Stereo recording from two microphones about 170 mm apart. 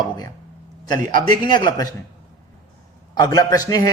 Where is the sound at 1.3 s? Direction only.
25° left (ahead or behind).